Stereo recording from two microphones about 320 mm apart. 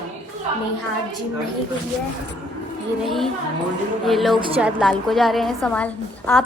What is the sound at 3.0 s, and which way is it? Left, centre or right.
A woman's voice, centre.